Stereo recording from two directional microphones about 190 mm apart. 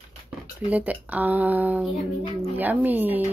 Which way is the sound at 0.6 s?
5° right (ahead or behind).